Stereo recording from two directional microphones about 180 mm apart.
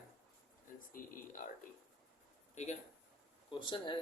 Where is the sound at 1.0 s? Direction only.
50° left (ahead or behind).